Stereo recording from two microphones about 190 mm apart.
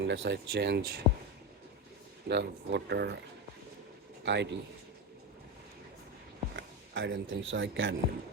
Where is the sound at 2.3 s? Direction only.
65° right (ahead or behind).